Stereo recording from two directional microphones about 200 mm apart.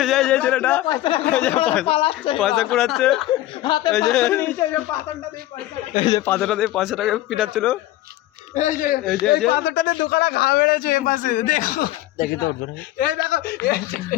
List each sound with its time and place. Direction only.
0.0 s a man's voice: centre (ahead or behind)
0.9 s a woman's voice: 25° left (ahead or behind)
1.2 s a man's voice: 5° left (ahead or behind)
1.9 s a woman's voice: 25° left (ahead or behind)
2.4 s a man's voice: centre (ahead or behind)
3.6 s a woman's voice: 20° left (ahead or behind)
3.9 s a man's voice: centre (ahead or behind)
5.9 s a woman's voice: 30° left (ahead or behind)
6.1 s a man's voice: 10° left (ahead or behind)
8.5 s speech: 40° left (ahead or behind)
9.5 s a man's voice: 55° left (ahead or behind)